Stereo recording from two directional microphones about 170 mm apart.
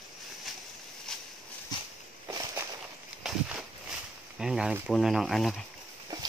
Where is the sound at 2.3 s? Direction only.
20° right (ahead or behind).